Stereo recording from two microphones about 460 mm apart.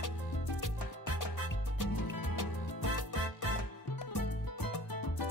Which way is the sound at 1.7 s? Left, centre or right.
Left.